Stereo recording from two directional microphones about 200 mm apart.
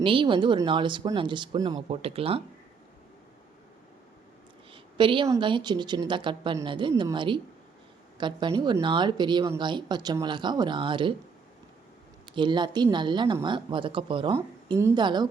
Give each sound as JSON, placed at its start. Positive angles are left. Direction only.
{"t": 0.0, "sound": "speech", "side_deg": -25}
{"t": 4.7, "sound": "speech", "side_deg": -25}
{"t": 12.3, "sound": "speech", "side_deg": -25}